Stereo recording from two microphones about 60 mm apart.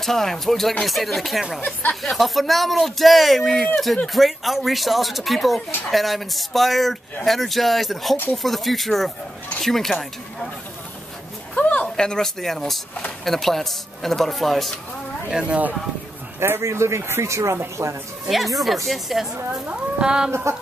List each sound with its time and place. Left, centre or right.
0.0 s speech: centre
1.6 s speech: left
2.0 s speech: centre
11.5 s speech: centre
15.2 s speech: centre
16.3 s a man's voice: right
18.9 s speech: centre
19.6 s speech: centre
20.5 s speech: right